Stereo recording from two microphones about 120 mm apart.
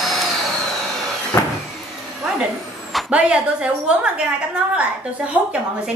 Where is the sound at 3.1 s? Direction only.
10° right (ahead or behind).